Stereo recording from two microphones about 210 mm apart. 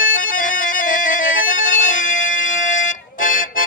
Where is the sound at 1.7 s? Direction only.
35° left (ahead or behind).